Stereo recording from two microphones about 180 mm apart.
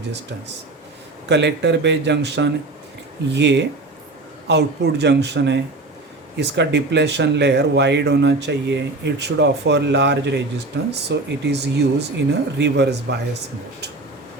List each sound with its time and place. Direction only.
1.3 s speech: 70° right (ahead or behind)